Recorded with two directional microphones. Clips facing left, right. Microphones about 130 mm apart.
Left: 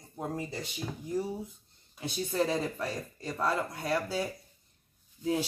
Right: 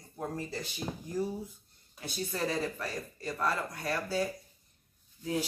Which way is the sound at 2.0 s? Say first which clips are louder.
Left 4 dB; 25° left (ahead or behind).